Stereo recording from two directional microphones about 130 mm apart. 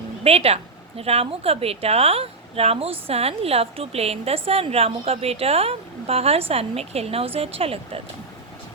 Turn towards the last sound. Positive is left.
turn(degrees=-45)  # may be behind; listen again after turning